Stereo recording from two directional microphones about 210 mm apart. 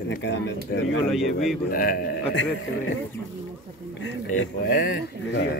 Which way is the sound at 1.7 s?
45° left (ahead or behind).